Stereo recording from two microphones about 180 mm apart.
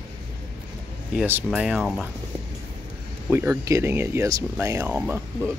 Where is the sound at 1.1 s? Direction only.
10° right (ahead or behind).